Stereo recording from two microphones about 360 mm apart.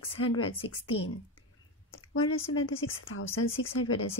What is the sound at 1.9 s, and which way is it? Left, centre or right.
A woman's voice, left.